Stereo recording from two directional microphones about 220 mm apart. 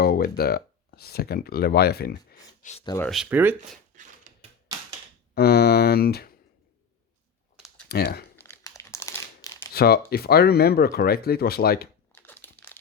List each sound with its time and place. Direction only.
0.0 s speech: 45° left (ahead or behind)
2.6 s speech: 30° left (ahead or behind)
3.1 s speech: 5° right (ahead or behind)
3.9 s a sound: 35° right (ahead or behind)
5.3 s speech: 45° left (ahead or behind)
7.9 s speech: 45° left (ahead or behind)
8.4 s crumpling: 15° left (ahead or behind)
9.6 s speech: 45° left (ahead or behind)
12.1 s crumpling: 10° left (ahead or behind)